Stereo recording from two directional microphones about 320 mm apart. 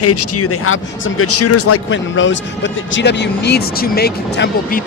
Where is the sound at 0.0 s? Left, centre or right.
Left.